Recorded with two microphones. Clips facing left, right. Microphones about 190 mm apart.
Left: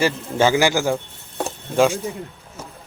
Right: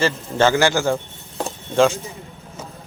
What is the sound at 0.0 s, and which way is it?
Speech, 10° left (ahead or behind).